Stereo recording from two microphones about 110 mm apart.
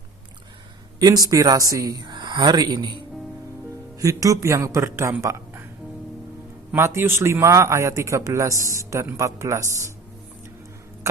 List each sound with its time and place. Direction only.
0.9 s speech: 35° right (ahead or behind)
3.9 s a man's voice: 30° right (ahead or behind)
5.2 s a sound: 25° right (ahead or behind)
6.7 s a man's voice: 25° right (ahead or behind)